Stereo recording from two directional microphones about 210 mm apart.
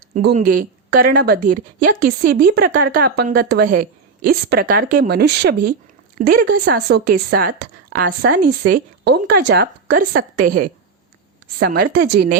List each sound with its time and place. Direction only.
0.3 s a woman's voice: 40° right (ahead or behind)